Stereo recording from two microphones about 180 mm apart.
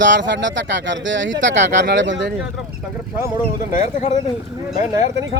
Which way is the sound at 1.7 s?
75° right (ahead or behind).